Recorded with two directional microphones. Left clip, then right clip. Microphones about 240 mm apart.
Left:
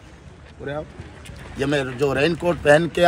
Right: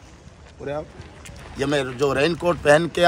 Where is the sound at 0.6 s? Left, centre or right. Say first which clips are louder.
Right 1 dB; right.